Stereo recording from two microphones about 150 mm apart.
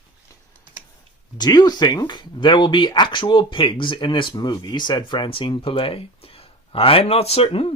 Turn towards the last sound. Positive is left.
turn(degrees=40)  # may be behind; listen again after turning